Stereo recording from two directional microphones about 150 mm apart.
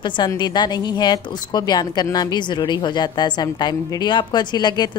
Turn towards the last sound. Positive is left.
turn(degrees=30)  # may be behind; listen again after turning